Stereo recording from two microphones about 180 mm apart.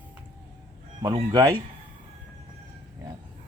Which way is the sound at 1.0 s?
25° right (ahead or behind).